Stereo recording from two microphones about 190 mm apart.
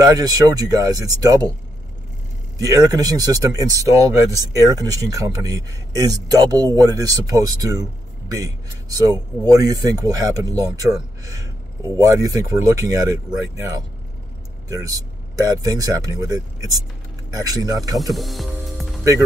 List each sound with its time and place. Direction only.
0.0 s speech: 20° right (ahead or behind)
2.6 s speech: 20° right (ahead or behind)
14.7 s speech: 20° right (ahead or behind)
18.1 s speech: centre (ahead or behind)